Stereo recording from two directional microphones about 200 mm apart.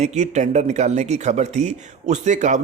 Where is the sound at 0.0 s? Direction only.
35° right (ahead or behind).